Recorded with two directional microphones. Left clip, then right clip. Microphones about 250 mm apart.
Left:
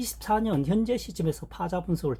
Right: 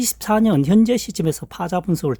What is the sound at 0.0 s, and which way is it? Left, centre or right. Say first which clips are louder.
Speech: right 8 dB; right.